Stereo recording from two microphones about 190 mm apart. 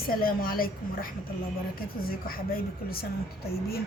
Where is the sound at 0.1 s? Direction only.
50° left (ahead or behind).